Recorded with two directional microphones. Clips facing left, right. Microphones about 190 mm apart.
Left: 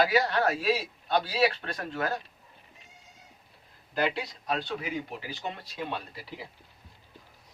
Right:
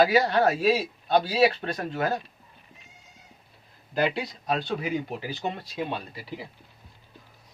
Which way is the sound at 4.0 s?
15° right (ahead or behind).